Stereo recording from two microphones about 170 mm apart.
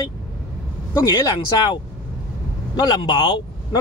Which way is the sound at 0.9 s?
25° left (ahead or behind).